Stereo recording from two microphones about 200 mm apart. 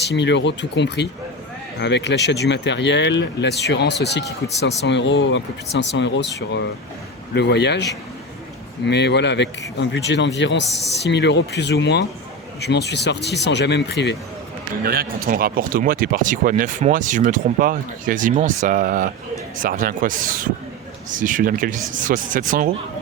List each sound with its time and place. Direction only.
0.1 s speech: 60° left (ahead or behind)
8.9 s speech: 55° left (ahead or behind)
14.8 s speech: 50° right (ahead or behind)